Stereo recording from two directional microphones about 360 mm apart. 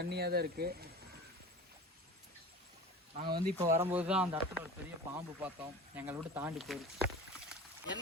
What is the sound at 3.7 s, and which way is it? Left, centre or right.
Speech, centre.